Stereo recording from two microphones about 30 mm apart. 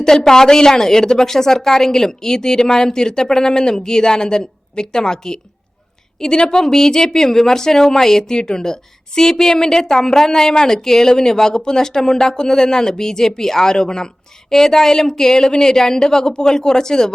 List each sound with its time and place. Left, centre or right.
0.0 s speech: centre
0.8 s speech: centre
10.8 s speech: centre